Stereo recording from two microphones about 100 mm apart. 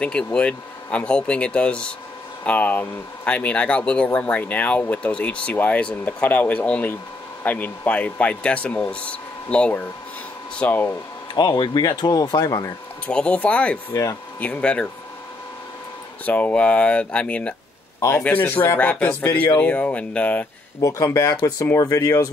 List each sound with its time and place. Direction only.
0.0 s speech: 10° left (ahead or behind)
11.3 s speech: 50° left (ahead or behind); by 12.7 s 35° left (ahead or behind)
13.0 s speech: 10° left (ahead or behind)
16.3 s speech: 15° left (ahead or behind)
20.8 s speech: 30° left (ahead or behind)